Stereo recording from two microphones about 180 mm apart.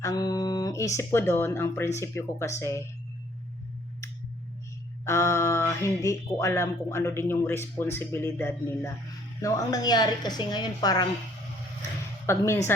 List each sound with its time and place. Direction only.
0.0 s speech: 20° left (ahead or behind)
5.0 s a woman's voice: 15° left (ahead or behind)
12.2 s speech: 15° left (ahead or behind)